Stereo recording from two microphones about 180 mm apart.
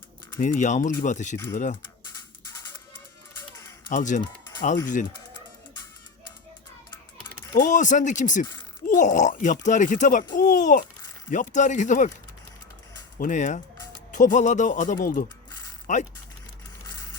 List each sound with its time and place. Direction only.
0.3 s a child's voice: 45° left (ahead or behind)
3.8 s a child's voice: 45° left (ahead or behind)
4.2 s music: 20° left (ahead or behind)
7.5 s a child's voice: 45° left (ahead or behind)
13.1 s a child's voice: 45° left (ahead or behind)